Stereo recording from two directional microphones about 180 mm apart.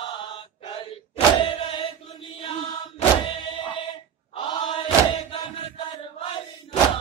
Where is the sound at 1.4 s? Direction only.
30° left (ahead or behind).